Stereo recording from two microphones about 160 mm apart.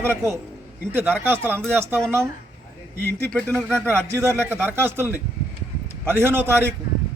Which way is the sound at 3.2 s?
5° left (ahead or behind).